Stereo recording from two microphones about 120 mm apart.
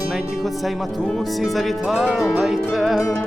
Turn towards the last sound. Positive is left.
turn(degrees=0)  # may be behind; listen again after turning